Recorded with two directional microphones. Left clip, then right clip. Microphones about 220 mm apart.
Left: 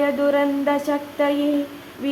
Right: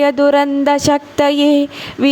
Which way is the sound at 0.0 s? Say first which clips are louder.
Right 7 dB; 45° right (ahead or behind).